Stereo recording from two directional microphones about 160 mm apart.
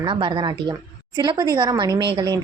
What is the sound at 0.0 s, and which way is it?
A woman's voice, 30° right (ahead or behind).